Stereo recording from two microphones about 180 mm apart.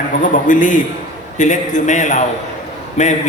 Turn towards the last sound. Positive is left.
turn(degrees=45)  # may be behind; listen again after turning